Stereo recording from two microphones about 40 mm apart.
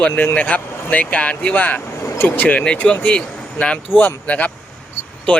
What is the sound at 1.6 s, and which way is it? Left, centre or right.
Speech, left.